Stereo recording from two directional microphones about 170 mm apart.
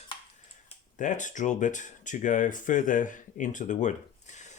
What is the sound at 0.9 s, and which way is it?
Speech, 50° left (ahead or behind).